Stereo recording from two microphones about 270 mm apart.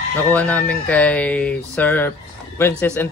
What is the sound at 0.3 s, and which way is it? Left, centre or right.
Speech, centre.